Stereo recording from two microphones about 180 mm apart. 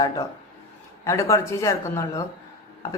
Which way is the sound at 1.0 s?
15° left (ahead or behind).